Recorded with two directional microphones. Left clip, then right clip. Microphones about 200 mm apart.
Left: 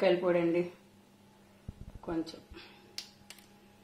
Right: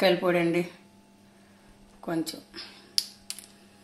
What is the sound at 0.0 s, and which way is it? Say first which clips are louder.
Speech: right 4 dB; 50° right (ahead or behind).